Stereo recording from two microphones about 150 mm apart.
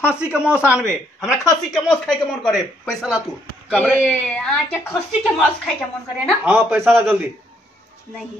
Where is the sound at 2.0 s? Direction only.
5° left (ahead or behind).